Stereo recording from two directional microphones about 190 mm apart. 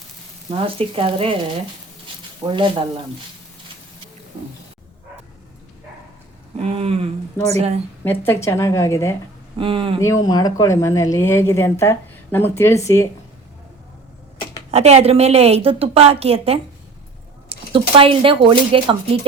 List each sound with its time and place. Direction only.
0.5 s speech: 30° right (ahead or behind)
2.4 s speech: 20° right (ahead or behind)
6.6 s a woman's voice: 30° right (ahead or behind)
8.0 s a woman's voice: 10° left (ahead or behind)
9.6 s speech: 25° right (ahead or behind)
10.2 s a woman's voice: 20° left (ahead or behind)
14.7 s a woman's voice: 35° right (ahead or behind)